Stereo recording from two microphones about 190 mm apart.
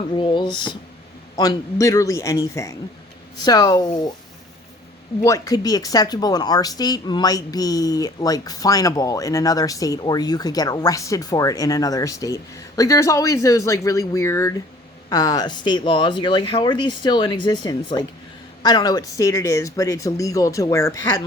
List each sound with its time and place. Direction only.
0.2 s speech: 25° left (ahead or behind)
5.2 s speech: 20° left (ahead or behind)